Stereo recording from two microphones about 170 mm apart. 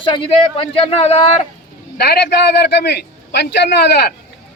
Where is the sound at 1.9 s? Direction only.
70° left (ahead or behind).